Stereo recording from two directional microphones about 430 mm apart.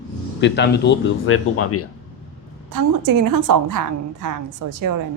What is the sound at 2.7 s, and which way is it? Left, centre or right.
A woman's voice, right.